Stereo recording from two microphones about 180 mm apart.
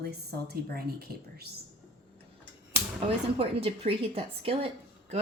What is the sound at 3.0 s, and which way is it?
A woman's voice, 30° right (ahead or behind).